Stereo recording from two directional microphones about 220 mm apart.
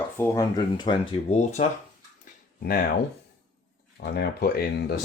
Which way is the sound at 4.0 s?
45° left (ahead or behind).